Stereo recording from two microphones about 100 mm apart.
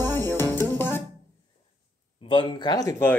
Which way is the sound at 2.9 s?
25° left (ahead or behind).